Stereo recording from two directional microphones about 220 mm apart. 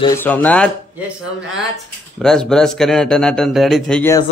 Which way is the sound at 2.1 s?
Centre (ahead or behind).